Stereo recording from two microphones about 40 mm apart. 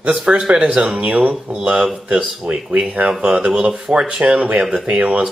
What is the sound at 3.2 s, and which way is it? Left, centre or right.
Speech, right.